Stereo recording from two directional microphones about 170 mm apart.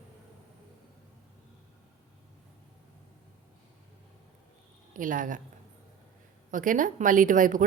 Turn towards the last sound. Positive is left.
turn(degrees=-50)  # may be behind; listen again after turning